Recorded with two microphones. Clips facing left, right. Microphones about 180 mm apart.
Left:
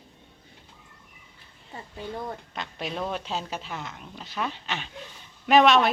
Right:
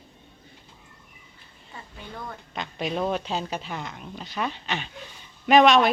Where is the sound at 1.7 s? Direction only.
30° left (ahead or behind).